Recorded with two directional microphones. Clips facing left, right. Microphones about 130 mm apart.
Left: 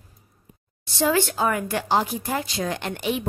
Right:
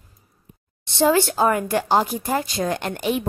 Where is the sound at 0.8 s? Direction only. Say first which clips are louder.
Right 4 dB; 30° right (ahead or behind).